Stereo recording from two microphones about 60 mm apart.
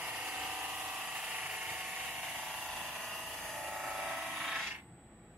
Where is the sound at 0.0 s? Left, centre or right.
Centre.